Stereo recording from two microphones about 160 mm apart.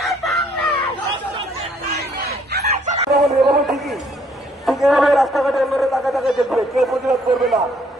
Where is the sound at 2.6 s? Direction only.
45° right (ahead or behind).